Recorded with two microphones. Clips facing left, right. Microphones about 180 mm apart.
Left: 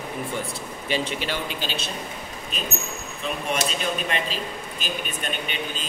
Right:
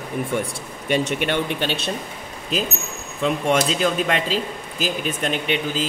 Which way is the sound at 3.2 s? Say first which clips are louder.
Right 8 dB; 90° right.